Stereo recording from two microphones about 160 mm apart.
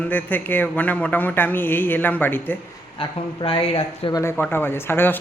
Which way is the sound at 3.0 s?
35° left (ahead or behind).